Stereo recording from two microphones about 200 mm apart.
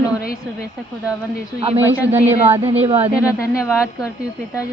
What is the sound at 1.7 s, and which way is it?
Speech, 10° right (ahead or behind).